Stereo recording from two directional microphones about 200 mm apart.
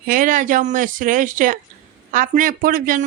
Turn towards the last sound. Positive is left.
turn(degrees=-45)  # may be behind; listen again after turning